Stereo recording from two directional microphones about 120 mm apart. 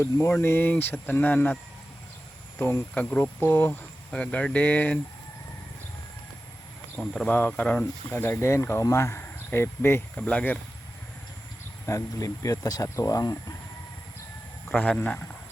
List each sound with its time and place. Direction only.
0.0 s speech: 20° left (ahead or behind)
2.6 s speech: 20° left (ahead or behind)
6.9 s speech: 5° left (ahead or behind)
11.9 s speech: 25° left (ahead or behind)
14.8 s speech: 15° left (ahead or behind)